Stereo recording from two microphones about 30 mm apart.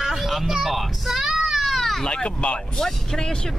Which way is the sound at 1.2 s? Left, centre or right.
Centre.